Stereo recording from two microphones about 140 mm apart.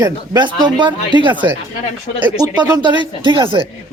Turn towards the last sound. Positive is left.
turn(degrees=-40)  # may be behind; listen again after turning